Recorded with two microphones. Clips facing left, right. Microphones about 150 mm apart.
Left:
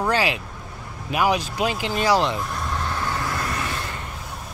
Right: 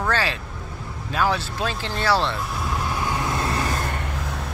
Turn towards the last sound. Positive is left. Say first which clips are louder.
# right 3 dB
turn(degrees=-35)  # may be behind; listen again after turning